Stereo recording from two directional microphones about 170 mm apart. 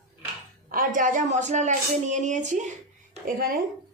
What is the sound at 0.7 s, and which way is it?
A woman's voice, 55° right (ahead or behind).